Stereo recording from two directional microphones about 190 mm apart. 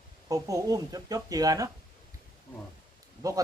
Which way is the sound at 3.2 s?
20° right (ahead or behind).